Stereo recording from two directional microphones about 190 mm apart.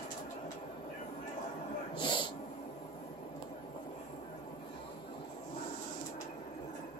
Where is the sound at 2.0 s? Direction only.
25° left (ahead or behind).